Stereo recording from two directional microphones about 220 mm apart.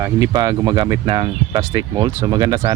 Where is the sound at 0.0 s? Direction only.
15° right (ahead or behind).